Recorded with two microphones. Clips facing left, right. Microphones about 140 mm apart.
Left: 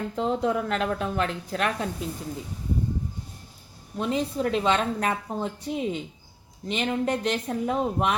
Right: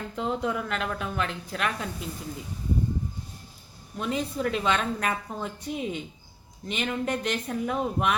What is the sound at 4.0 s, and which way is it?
A woman's voice, 30° left (ahead or behind).